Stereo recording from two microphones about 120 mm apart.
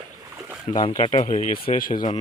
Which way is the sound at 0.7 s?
40° left (ahead or behind).